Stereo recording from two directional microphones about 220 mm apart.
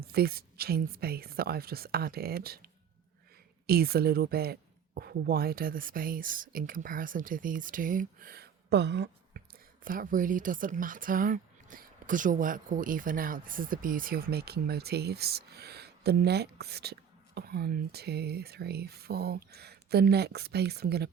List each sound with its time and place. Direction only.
0.0 s speech: 45° right (ahead or behind)
3.7 s speech: 45° right (ahead or behind)